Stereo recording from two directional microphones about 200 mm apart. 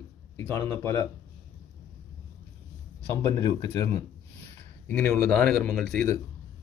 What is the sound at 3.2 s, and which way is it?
Speech, 15° left (ahead or behind).